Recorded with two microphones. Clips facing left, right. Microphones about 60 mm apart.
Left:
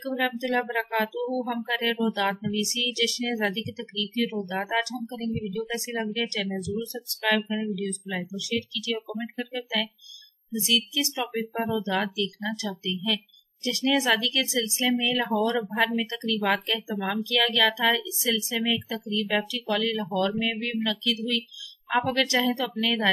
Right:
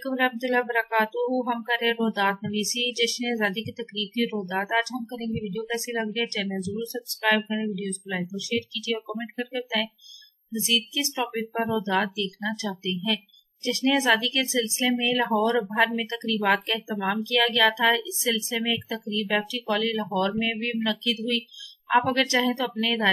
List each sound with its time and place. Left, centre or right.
0.1 s speech: centre
1.2 s speech: centre
1.6 s speech: centre
6.0 s speech: right
11.3 s speech: centre